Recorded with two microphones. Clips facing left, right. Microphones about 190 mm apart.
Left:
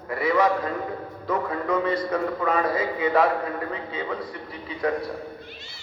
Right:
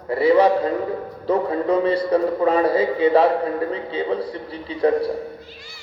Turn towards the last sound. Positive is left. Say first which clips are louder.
# right 7 dB
turn(degrees=-30)  # may be behind; listen again after turning